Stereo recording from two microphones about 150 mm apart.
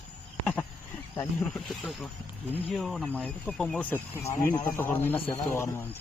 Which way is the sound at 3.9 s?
20° left (ahead or behind).